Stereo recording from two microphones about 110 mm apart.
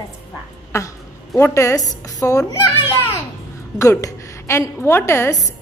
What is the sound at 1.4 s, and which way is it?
A woman's voice, 25° left (ahead or behind).